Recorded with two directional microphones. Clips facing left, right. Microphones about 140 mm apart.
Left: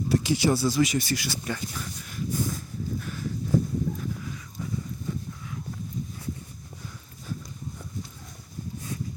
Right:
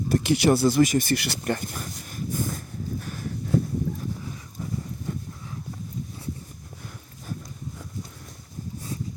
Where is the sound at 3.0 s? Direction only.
45° right (ahead or behind).